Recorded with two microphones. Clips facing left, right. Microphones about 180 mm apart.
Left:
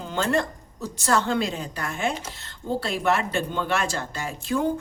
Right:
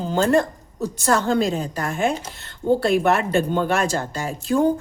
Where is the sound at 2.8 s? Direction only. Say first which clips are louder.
Right 6 dB; 55° right (ahead or behind).